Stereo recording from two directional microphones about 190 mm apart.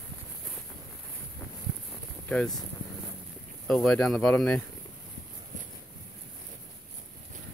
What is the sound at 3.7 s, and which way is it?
Speech, centre (ahead or behind).